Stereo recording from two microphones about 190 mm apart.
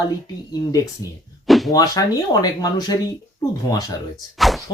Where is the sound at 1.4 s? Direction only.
Centre (ahead or behind).